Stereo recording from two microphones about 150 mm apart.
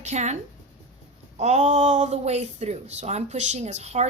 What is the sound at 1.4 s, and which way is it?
Speech, 50° right (ahead or behind).